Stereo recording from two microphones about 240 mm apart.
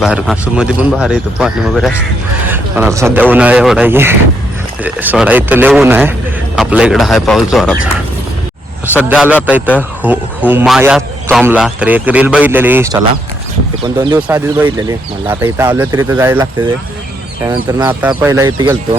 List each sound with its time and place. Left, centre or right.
0.0 s a man's voice: centre
8.9 s a man's voice: centre
14.2 s a man's voice: centre